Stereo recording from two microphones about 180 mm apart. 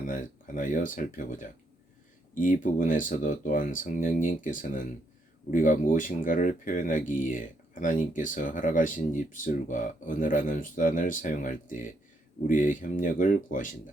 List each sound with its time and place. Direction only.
0.1 s speech: 50° left (ahead or behind)